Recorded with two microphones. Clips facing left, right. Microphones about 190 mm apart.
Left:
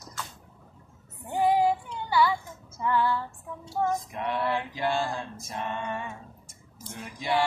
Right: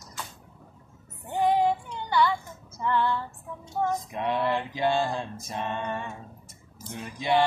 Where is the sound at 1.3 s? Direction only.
5° left (ahead or behind).